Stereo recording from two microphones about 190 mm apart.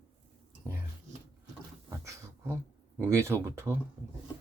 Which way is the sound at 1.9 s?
15° right (ahead or behind).